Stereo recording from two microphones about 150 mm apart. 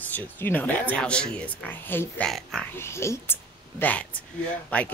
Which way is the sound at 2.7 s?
15° left (ahead or behind).